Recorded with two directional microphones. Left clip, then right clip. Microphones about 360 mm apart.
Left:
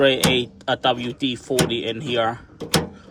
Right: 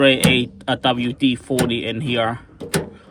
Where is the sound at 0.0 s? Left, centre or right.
Centre.